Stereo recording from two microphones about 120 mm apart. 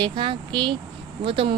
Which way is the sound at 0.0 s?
45° right (ahead or behind).